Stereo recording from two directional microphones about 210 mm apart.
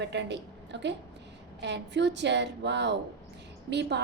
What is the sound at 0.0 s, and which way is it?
A woman's voice, 55° right (ahead or behind).